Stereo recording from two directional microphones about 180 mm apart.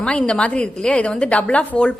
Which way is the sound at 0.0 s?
5° left (ahead or behind).